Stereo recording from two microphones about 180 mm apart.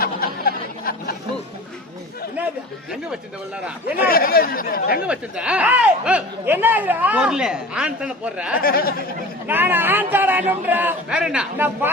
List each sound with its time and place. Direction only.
0.0 s a sound: 55° left (ahead or behind)
3.9 s speech: 55° left (ahead or behind)
5.0 s speech: 5° right (ahead or behind)
8.6 s speech: 55° left (ahead or behind)
9.5 s speech: 10° right (ahead or behind)